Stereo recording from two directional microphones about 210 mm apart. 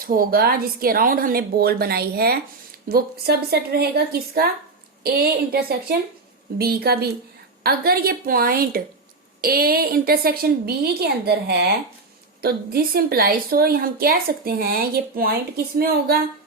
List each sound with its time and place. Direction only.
0.0 s a woman's voice: 40° right (ahead or behind)